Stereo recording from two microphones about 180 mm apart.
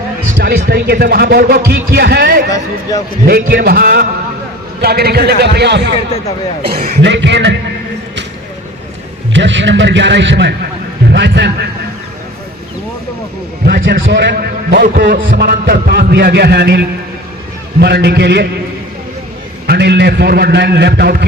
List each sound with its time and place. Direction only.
0.3 s a man's voice: 65° right (ahead or behind)
9.3 s a man's voice: 85° right; by 11.5 s 70° right (ahead or behind)
13.7 s a man's voice: 65° right (ahead or behind)
19.6 s a man's voice: 65° right (ahead or behind)